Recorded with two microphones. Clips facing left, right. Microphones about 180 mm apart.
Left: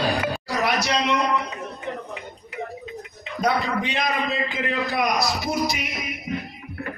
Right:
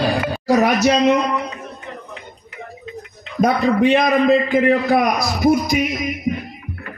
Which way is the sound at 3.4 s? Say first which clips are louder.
Right 8 dB; 55° right (ahead or behind).